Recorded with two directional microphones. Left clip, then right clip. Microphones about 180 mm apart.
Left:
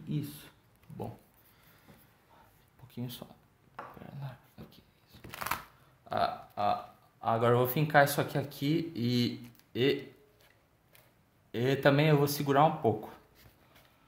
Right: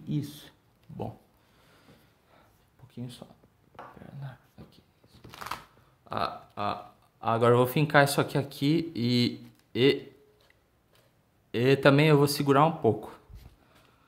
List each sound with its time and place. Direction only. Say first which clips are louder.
2.9 s speech: even; 10° right (ahead or behind)
4.0 s dog: even; 15° right (ahead or behind)
5.2 s a sound: left 2 dB; 35° left (ahead or behind)
6.0 s speech: left 1 dB; 35° right (ahead or behind)
11.5 s speech: right 5 dB; 45° right (ahead or behind)